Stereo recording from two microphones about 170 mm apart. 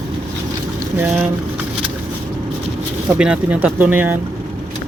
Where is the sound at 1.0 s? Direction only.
10° right (ahead or behind).